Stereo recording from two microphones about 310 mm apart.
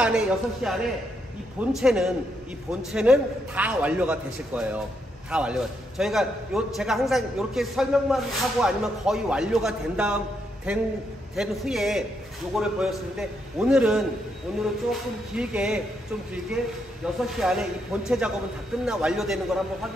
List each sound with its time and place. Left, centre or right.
0.0 s a man's voice: centre
1.8 s a man's voice: centre
17.0 s a man's voice: centre